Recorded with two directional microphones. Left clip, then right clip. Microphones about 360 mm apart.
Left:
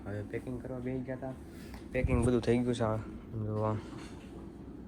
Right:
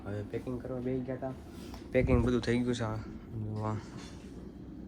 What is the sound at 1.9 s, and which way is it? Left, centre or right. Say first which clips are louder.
Speech: right 5 dB; centre.